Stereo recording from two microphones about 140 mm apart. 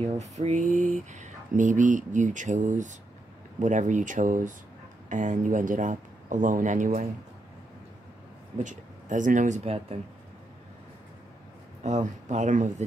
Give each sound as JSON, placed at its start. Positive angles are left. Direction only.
{"t": 0.2, "sound": "speech", "side_deg": -55}
{"t": 8.6, "sound": "speech", "side_deg": -65}
{"t": 11.8, "sound": "speech", "side_deg": -55}